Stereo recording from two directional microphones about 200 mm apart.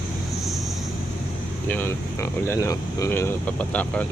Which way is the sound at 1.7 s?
10° left (ahead or behind).